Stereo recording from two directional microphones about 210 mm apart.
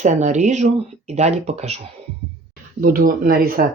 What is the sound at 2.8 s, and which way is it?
Speech, 40° right (ahead or behind).